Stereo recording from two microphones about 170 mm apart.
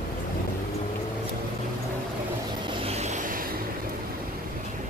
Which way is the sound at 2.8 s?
40° right (ahead or behind).